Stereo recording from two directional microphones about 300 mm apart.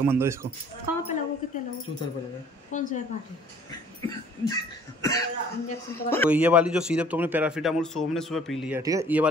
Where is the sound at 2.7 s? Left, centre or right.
Left.